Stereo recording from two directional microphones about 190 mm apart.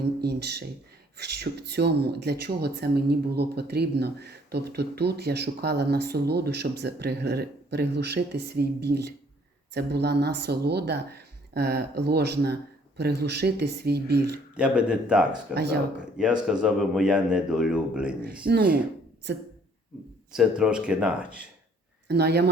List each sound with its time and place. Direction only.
0.2 s speech: 60° right (ahead or behind)
14.5 s a man's voice: 5° right (ahead or behind)
15.5 s speech: 60° right (ahead or behind)
16.1 s a man's voice: 5° right (ahead or behind)
18.4 s speech: 50° right (ahead or behind)
20.3 s a man's voice: 5° right (ahead or behind)
22.0 s speech: 60° right (ahead or behind)